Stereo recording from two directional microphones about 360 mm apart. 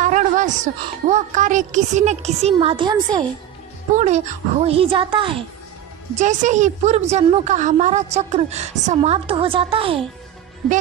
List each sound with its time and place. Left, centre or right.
0.0 s a woman's voice: right